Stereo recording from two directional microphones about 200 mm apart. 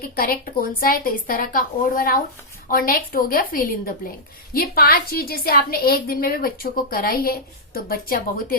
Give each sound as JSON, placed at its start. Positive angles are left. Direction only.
{"t": 0.0, "sound": "a woman's voice", "side_deg": 45}